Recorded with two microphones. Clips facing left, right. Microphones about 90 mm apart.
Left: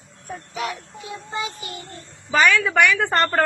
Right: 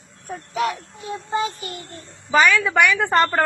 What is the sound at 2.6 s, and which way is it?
Speech, 15° right (ahead or behind).